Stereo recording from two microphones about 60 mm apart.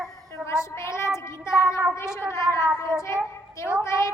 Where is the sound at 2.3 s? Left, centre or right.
Left.